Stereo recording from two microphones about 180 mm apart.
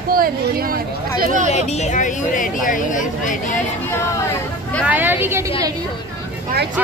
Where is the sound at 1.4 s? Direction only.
40° left (ahead or behind).